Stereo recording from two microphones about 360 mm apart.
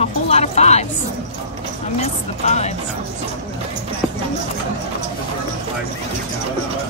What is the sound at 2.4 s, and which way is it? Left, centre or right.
Speech, centre.